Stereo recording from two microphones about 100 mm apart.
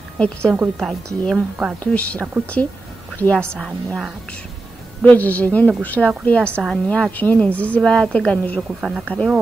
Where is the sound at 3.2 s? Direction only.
10° left (ahead or behind).